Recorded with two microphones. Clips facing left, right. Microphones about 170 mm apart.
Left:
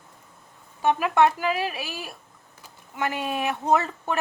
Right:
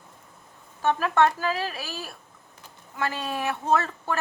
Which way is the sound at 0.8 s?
15° left (ahead or behind).